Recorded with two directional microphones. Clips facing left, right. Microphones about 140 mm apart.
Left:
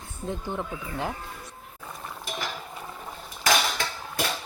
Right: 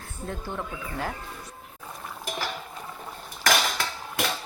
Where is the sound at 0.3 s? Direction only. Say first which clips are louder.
Left 2 dB; 20° left (ahead or behind).